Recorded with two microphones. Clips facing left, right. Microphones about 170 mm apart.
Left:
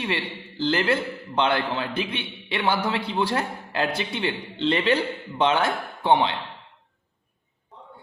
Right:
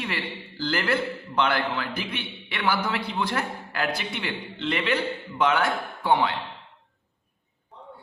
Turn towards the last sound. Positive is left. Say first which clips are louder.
# left 2 dB
turn(degrees=25)  # may be behind; listen again after turning